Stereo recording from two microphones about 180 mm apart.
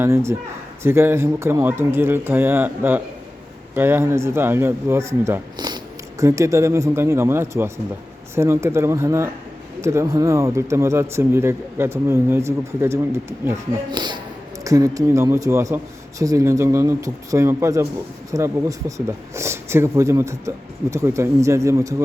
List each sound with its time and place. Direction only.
0.0 s speech: 15° right (ahead or behind)